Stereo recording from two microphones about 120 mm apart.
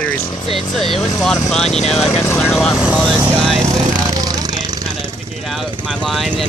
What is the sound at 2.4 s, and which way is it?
Speech, 5° left (ahead or behind).